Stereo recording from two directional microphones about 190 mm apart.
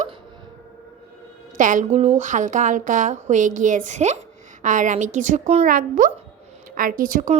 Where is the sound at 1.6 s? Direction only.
40° right (ahead or behind).